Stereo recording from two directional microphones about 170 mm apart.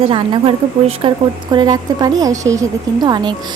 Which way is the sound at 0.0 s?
35° right (ahead or behind).